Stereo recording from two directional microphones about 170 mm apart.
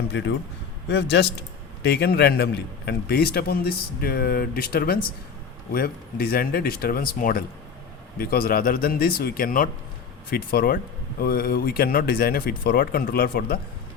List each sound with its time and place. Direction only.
0.1 s a man's voice: 90° left
1.8 s a man's voice: 70° left (ahead or behind)